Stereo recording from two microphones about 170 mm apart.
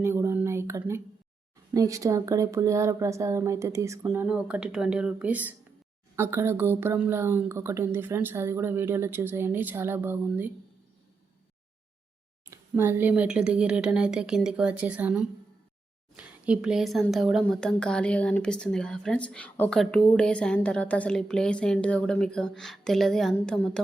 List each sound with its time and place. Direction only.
0.0 s a sound: 15° right (ahead or behind)
1.7 s speech: 20° right (ahead or behind)
12.5 s a woman's voice: 15° right (ahead or behind); by 23.8 s 5° left (ahead or behind)